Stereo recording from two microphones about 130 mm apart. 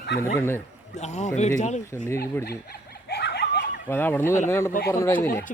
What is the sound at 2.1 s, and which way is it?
Speech, 20° left (ahead or behind).